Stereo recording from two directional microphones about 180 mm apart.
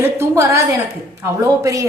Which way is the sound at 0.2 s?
15° right (ahead or behind).